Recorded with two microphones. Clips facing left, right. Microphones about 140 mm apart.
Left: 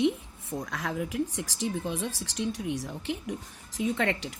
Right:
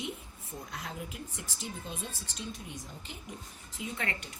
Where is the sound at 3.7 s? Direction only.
90° left.